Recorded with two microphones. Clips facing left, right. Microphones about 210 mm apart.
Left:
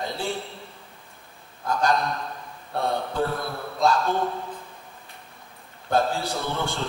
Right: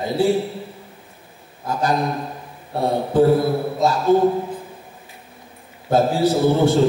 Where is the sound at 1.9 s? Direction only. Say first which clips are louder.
Right 5 dB; 25° right (ahead or behind).